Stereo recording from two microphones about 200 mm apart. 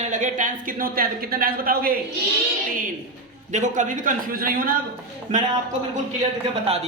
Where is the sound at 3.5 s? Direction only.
40° right (ahead or behind).